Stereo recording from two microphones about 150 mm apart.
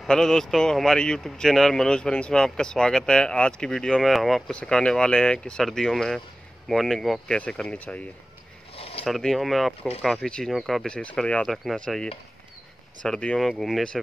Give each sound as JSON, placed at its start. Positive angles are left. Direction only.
{"t": 0.0, "sound": "speech", "side_deg": 5}
{"t": 8.7, "sound": "zipper", "side_deg": 40}
{"t": 9.0, "sound": "speech", "side_deg": 0}